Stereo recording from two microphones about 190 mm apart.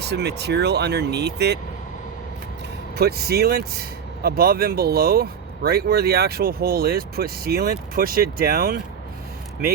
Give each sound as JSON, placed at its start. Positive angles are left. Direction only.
{"t": 0.0, "sound": "speech", "side_deg": -60}
{"t": 2.9, "sound": "speech", "side_deg": -55}